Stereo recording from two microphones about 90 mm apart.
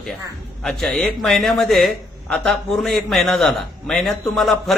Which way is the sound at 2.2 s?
10° left (ahead or behind).